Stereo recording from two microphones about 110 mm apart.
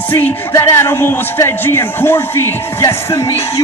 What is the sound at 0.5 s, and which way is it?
A man's voice, 25° left (ahead or behind).